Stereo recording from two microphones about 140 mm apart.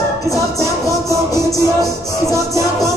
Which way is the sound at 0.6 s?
20° right (ahead or behind).